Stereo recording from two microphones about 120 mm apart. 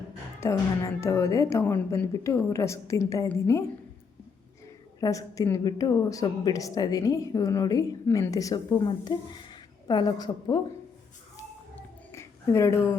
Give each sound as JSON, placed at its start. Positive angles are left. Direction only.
{"t": 0.3, "sound": "a woman's voice", "side_deg": 25}
{"t": 4.9, "sound": "a woman's voice", "side_deg": 30}
{"t": 12.1, "sound": "a sound", "side_deg": 25}